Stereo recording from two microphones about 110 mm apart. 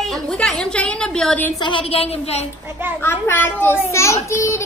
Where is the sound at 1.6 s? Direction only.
50° left (ahead or behind); by 2.4 s 70° left (ahead or behind).